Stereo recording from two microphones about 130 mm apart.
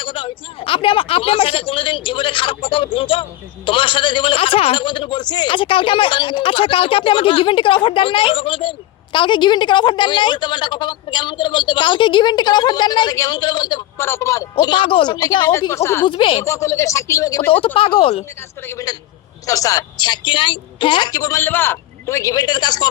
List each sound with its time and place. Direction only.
0.0 s a man's voice: 40° left (ahead or behind)
14.0 s speech: 20° left (ahead or behind)
14.6 s a man's voice: 35° left (ahead or behind)
15.7 s speech: 20° left (ahead or behind)
16.0 s a man's voice: 40° left (ahead or behind)
16.4 s speech: 20° left (ahead or behind)
17.7 s speech: 45° left (ahead or behind)
18.7 s a man's voice: 25° left (ahead or behind)